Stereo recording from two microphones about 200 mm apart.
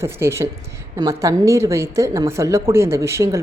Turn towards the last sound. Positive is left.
turn(degrees=-15)  # may be behind; listen again after turning